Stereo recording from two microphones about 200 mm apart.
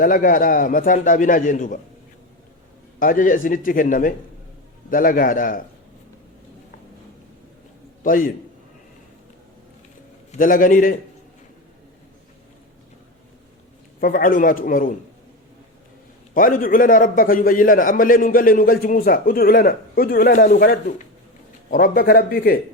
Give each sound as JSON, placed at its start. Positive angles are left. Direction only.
{"t": 0.0, "sound": "a man's voice", "side_deg": 45}
{"t": 3.0, "sound": "a man's voice", "side_deg": 45}
{"t": 8.0, "sound": "a man's voice", "side_deg": 45}
{"t": 10.3, "sound": "a man's voice", "side_deg": 45}
{"t": 14.0, "sound": "a man's voice", "side_deg": 45}
{"t": 16.3, "sound": "a man's voice", "side_deg": 45}